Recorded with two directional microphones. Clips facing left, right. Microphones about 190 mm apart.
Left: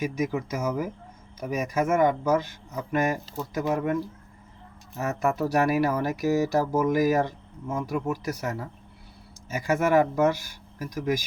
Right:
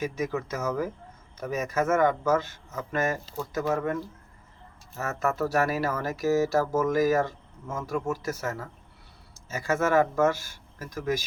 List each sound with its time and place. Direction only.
0.0 s speech: 10° left (ahead or behind)
4.9 s speech: 15° left (ahead or behind)